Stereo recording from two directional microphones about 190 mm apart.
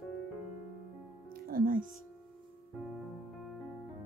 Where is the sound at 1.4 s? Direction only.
50° right (ahead or behind).